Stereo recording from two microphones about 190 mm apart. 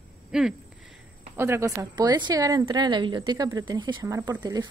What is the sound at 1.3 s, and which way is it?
A woman's voice, 15° right (ahead or behind).